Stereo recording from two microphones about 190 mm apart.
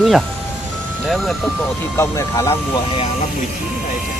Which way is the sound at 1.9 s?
15° left (ahead or behind).